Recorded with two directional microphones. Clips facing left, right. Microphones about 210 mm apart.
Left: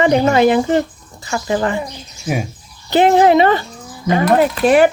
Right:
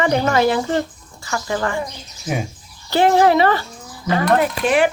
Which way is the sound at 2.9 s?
20° left (ahead or behind).